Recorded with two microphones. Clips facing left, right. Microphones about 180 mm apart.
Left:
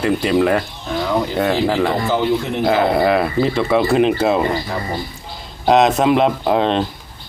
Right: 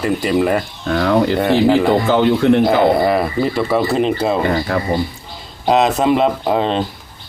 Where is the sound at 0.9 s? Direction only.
70° right (ahead or behind).